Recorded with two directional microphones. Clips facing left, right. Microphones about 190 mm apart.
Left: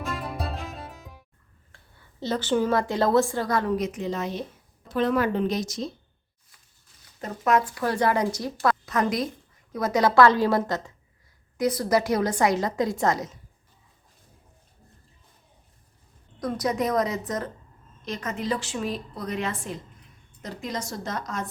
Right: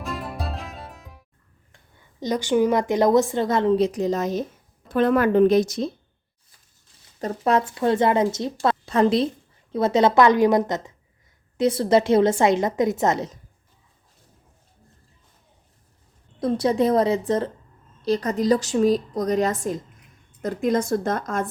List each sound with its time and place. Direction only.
0.0 s music: centre (ahead or behind)
1.7 s a woman's voice: 15° right (ahead or behind); by 4.4 s 40° right (ahead or behind)
4.9 s a woman's voice: 55° right (ahead or behind)
7.2 s a woman's voice: 30° right (ahead or behind)
16.4 s a woman's voice: 30° right (ahead or behind); by 21.5 s 50° right (ahead or behind)